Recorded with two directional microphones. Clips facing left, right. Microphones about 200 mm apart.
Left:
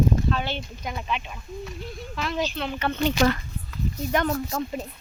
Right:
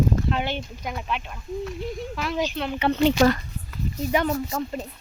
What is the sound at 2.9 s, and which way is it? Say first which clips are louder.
Speech: right 4 dB; 35° right (ahead or behind).